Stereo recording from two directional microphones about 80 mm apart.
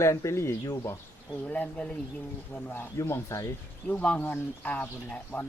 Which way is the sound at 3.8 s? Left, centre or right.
Centre.